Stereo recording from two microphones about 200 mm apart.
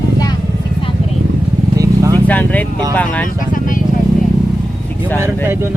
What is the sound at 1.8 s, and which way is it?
Vehicle, 15° right (ahead or behind).